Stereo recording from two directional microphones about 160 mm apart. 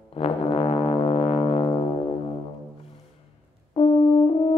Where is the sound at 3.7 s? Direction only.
35° left (ahead or behind).